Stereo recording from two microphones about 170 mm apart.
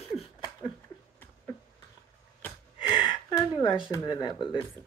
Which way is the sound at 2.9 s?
25° left (ahead or behind).